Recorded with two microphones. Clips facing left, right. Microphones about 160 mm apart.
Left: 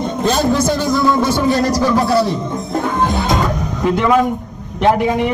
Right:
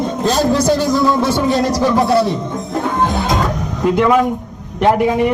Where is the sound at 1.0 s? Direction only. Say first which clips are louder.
Even; centre (ahead or behind).